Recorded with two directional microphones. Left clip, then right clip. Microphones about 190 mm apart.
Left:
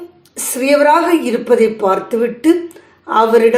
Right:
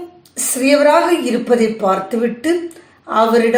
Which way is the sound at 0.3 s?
30° left (ahead or behind).